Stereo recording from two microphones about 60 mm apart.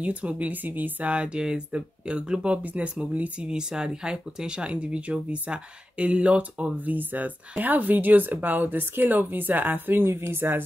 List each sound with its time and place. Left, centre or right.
0.0 s speech: right